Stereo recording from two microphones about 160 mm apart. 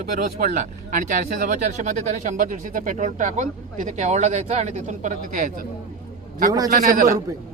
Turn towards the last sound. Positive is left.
turn(degrees=-60)  # may be behind; listen again after turning